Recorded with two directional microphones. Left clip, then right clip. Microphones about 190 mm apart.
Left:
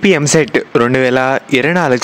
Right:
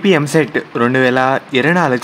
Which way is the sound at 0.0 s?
35° left (ahead or behind).